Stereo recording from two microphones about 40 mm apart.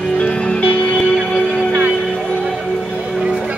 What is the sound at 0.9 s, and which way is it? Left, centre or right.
Music, centre.